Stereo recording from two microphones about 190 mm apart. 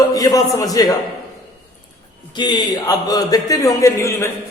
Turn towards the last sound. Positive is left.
turn(degrees=15)  # may be behind; listen again after turning